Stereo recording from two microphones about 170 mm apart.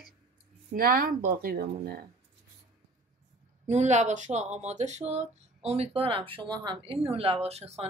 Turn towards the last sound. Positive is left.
turn(degrees=-40)  # may be behind; listen again after turning